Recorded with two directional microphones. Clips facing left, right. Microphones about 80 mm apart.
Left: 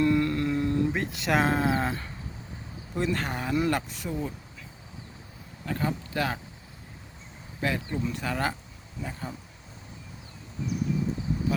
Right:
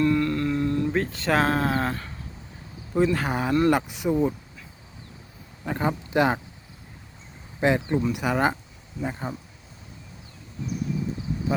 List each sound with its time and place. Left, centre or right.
0.0 s humming: left
0.9 s speech: centre
2.9 s speech: centre
5.6 s speech: right
7.6 s speech: right